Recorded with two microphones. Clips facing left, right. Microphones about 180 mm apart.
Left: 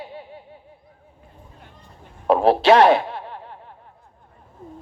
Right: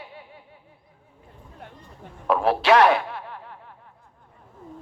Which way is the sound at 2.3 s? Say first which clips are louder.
Left 4 dB; 30° left (ahead or behind).